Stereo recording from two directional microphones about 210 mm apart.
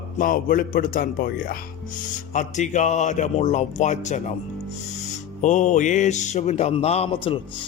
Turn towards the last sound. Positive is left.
turn(degrees=25)  # may be behind; listen again after turning